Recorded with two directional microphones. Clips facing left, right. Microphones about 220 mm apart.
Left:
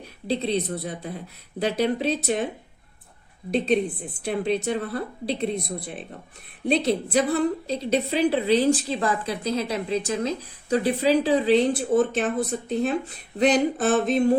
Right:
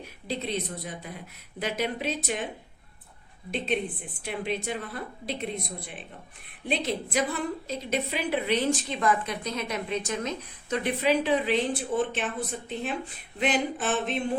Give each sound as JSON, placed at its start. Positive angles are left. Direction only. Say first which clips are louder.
{"t": 0.3, "sound": "a woman's voice", "louder": "left 7 dB", "side_deg": 35}
{"t": 3.5, "sound": "a woman's voice", "louder": "left 7 dB", "side_deg": 35}